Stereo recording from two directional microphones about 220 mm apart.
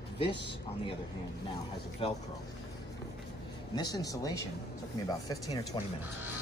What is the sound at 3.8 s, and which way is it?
Speech, 15° left (ahead or behind).